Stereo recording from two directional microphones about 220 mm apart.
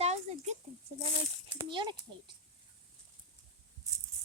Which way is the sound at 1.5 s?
20° right (ahead or behind).